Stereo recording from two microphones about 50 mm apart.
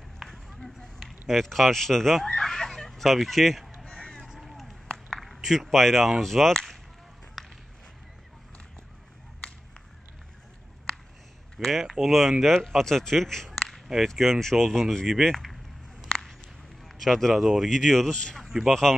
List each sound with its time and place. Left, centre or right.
0.2 s run: centre
1.3 s speech: centre
2.3 s fowl: centre
3.9 s a sound: centre
4.3 s a sound: centre
5.2 s speech: centre
7.4 s walk: centre
11.6 s speech: centre
16.8 s speech: centre